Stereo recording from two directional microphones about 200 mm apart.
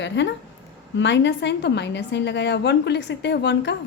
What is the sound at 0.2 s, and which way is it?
A woman's voice, 65° left (ahead or behind).